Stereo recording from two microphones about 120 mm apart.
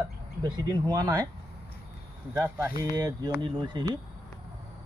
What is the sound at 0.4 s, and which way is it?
Speech, 35° right (ahead or behind).